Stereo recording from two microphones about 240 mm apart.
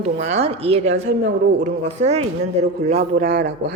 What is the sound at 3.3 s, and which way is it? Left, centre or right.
Speech, right.